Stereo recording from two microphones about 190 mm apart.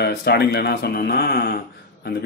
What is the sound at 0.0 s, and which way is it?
Speech, 60° left (ahead or behind).